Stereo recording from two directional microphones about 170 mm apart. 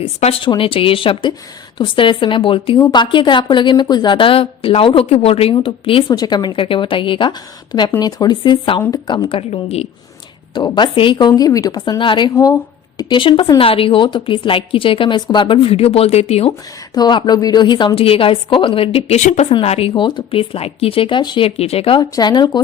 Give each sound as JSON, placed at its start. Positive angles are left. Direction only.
{"t": 0.0, "sound": "a woman's voice", "side_deg": 35}
{"t": 10.5, "sound": "a woman's voice", "side_deg": 25}
{"t": 16.5, "sound": "a woman's voice", "side_deg": 25}
{"t": 22.1, "sound": "speech", "side_deg": 25}